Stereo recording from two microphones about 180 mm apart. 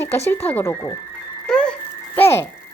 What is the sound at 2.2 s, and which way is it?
Speech, 15° left (ahead or behind).